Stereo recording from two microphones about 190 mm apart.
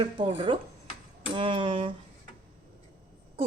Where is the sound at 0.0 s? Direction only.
25° right (ahead or behind).